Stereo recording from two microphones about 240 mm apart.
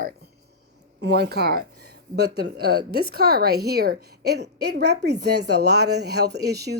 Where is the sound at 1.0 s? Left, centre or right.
Right.